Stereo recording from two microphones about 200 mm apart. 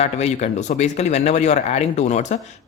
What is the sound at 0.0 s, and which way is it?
Speech, 35° left (ahead or behind).